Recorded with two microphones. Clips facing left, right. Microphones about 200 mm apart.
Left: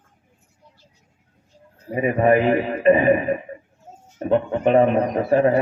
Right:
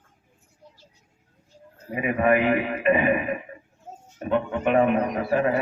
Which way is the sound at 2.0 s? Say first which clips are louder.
Left 4 dB; 35° left (ahead or behind).